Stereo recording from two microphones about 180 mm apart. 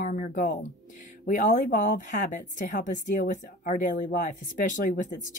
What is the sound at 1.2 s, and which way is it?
A woman's voice, 50° left (ahead or behind).